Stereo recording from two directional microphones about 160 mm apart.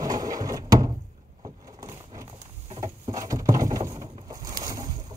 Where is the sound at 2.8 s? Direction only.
20° right (ahead or behind).